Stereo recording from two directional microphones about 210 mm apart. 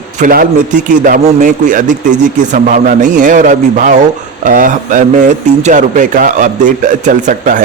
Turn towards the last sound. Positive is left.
turn(degrees=-35)  # may be behind; listen again after turning